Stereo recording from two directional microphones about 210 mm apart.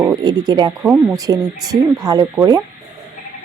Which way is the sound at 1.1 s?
15° right (ahead or behind).